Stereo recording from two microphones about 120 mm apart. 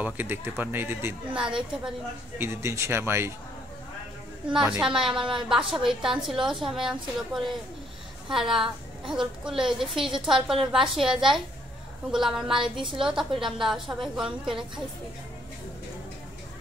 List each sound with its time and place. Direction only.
0.0 s speech: 15° right (ahead or behind)
1.4 s speech: 5° right (ahead or behind)
2.3 s a man's voice: 20° right (ahead or behind)
4.5 s a woman's voice: 5° right (ahead or behind)